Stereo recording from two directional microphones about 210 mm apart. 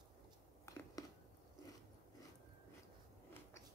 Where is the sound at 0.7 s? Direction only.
15° left (ahead or behind).